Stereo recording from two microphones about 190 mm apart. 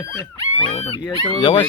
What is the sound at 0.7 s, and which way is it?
Speech, 25° left (ahead or behind).